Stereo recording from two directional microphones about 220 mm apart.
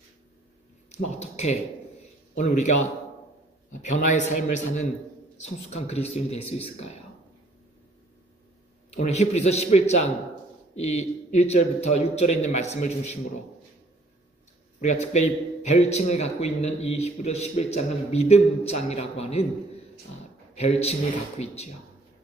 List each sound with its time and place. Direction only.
0.9 s a sound: 30° left (ahead or behind)
2.3 s a man's voice: 30° left (ahead or behind)
8.9 s a man's voice: 30° left (ahead or behind)
14.8 s a man's voice: 30° left (ahead or behind)
20.5 s a man's voice: 30° left (ahead or behind)